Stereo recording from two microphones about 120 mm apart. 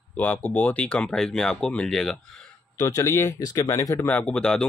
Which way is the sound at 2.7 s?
25° left (ahead or behind).